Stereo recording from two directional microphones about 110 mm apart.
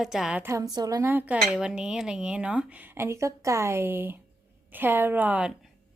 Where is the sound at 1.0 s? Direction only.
15° right (ahead or behind).